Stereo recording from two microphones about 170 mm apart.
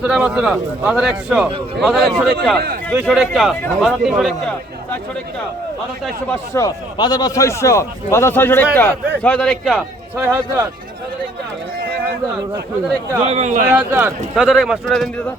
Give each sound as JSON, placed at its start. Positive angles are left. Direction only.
{"t": 0.0, "sound": "speech", "side_deg": -5}
{"t": 6.5, "sound": "a man's voice", "side_deg": 20}
{"t": 10.2, "sound": "speech", "side_deg": -15}
{"t": 13.2, "sound": "speech", "side_deg": -40}
{"t": 13.7, "sound": "speech", "side_deg": -10}